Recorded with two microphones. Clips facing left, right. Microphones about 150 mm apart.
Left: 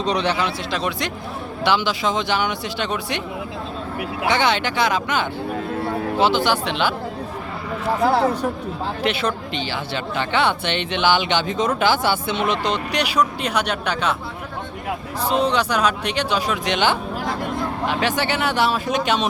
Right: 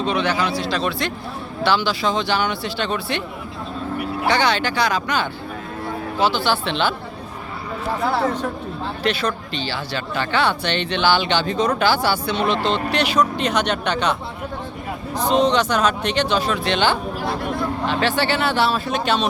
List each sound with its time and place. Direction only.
0.0 s speech: 35° left (ahead or behind); by 3.2 s 15° left (ahead or behind)
4.3 s speech: 20° left (ahead or behind)
9.0 s speech: 20° left (ahead or behind)
15.2 s speech: 5° left (ahead or behind)